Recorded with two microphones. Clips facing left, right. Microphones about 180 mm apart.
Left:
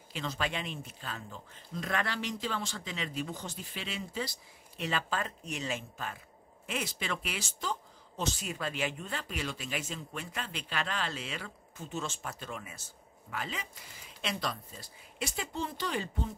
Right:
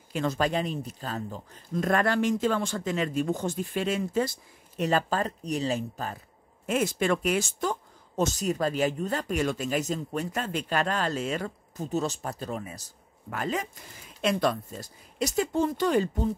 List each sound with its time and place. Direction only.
0.1 s speech: 50° right (ahead or behind)